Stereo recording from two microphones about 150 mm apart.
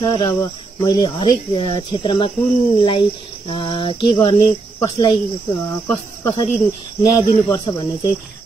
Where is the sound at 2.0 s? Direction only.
30° left (ahead or behind).